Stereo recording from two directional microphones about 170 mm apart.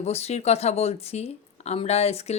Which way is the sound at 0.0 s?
40° left (ahead or behind).